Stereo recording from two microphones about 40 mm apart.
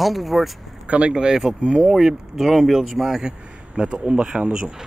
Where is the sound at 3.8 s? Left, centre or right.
Right.